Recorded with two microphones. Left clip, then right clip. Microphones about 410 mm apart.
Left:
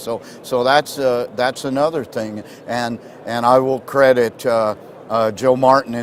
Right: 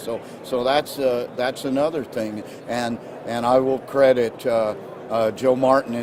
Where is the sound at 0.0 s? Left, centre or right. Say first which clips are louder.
Left 4 dB; left.